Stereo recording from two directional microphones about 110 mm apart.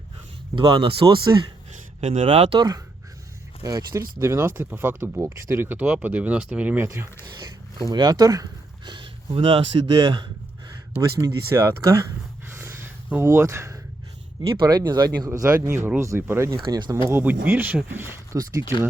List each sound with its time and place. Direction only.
0.5 s speech: 45° right (ahead or behind)
2.2 s speech: 60° right (ahead or behind)
2.6 s speech: 40° right (ahead or behind); by 6.8 s 10° right (ahead or behind)
6.8 s speech: 25° right (ahead or behind)
7.3 s speech: 40° right (ahead or behind); by 9.6 s 55° right (ahead or behind)
10.0 s speech: 40° right (ahead or behind)
10.9 s speech: 25° right (ahead or behind)
14.5 s speech: 40° right (ahead or behind)
15.3 s speech: 25° right (ahead or behind)
16.6 s speech: 40° right (ahead or behind)
17.1 s speech: 20° right (ahead or behind)
18.3 s speech: 30° right (ahead or behind)